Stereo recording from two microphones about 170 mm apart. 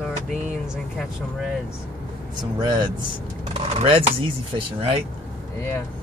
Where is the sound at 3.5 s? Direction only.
35° right (ahead or behind).